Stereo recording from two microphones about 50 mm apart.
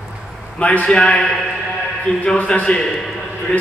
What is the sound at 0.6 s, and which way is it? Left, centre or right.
Speech, left.